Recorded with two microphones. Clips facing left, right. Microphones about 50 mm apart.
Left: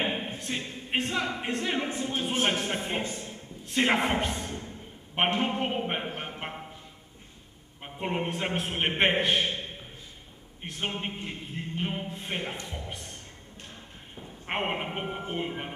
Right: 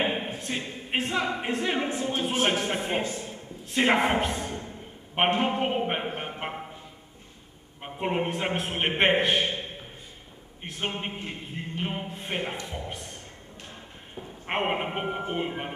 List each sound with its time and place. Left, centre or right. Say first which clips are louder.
0.0 s a capella: right 3 dB; centre
0.4 s speech: right 2 dB; centre
3.1 s a sound: right 3 dB; centre
5.4 s speech: right 3 dB; centre
6.1 s a sound: right 3 dB; centre
7.8 s a man's voice: right 3 dB; centre